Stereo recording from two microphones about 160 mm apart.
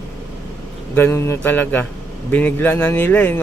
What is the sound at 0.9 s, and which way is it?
Speech, 15° left (ahead or behind).